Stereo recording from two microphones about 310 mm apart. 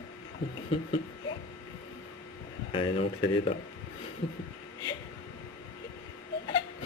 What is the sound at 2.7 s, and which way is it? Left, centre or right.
Speech, centre.